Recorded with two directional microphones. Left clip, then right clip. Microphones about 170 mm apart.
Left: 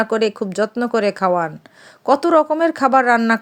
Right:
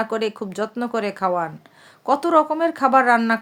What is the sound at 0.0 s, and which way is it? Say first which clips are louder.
Speech: left 5 dB; 35° left (ahead or behind).